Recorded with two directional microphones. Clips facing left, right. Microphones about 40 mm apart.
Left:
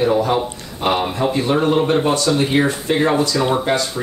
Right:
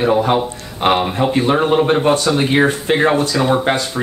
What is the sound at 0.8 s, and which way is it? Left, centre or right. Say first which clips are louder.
Speech: right 4 dB; right.